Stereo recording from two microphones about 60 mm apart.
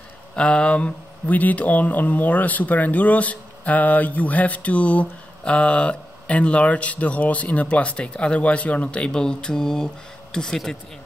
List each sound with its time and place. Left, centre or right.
0.4 s speech: centre